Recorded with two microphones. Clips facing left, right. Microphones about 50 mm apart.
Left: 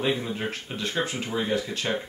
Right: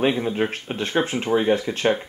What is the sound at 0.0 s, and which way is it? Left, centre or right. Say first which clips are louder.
Speech: right 6 dB; right.